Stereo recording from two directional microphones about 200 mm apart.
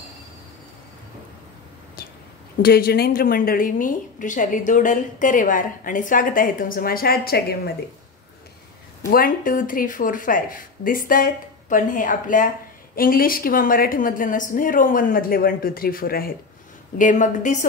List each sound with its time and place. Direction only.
2.6 s speech: 50° left (ahead or behind)
9.1 s a woman's voice: 45° left (ahead or behind)